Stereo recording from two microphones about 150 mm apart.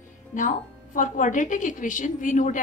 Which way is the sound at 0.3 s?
60° left (ahead or behind).